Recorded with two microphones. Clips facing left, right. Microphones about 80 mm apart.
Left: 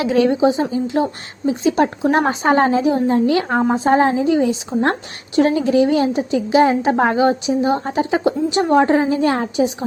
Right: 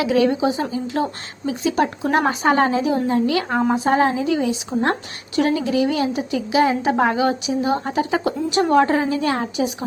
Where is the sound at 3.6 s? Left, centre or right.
Centre.